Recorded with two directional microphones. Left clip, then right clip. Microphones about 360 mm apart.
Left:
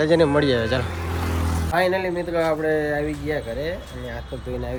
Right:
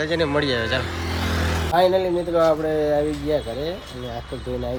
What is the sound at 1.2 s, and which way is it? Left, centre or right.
Vehicle, right.